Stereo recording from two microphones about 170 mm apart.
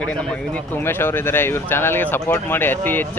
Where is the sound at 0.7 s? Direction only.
15° left (ahead or behind).